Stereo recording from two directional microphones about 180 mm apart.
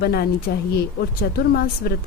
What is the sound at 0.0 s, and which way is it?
Speech, 60° left (ahead or behind).